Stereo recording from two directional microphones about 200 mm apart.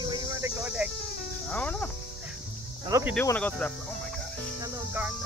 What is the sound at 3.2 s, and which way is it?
Speech, 10° left (ahead or behind).